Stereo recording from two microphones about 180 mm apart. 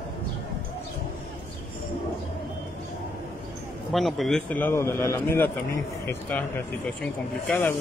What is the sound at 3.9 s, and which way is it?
A man's voice, centre (ahead or behind).